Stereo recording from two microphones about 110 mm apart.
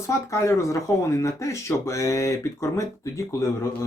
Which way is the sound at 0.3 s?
30° left (ahead or behind).